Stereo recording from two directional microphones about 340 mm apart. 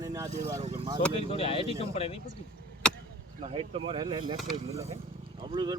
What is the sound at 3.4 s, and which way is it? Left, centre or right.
Speech, centre.